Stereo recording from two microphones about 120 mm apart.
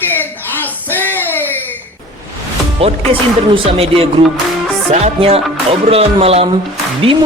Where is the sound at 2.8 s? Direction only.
50° right (ahead or behind).